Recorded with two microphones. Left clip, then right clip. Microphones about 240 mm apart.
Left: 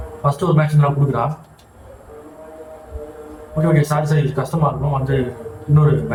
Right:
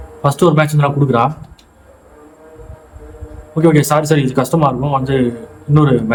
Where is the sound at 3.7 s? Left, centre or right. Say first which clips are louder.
Right 7 dB; right.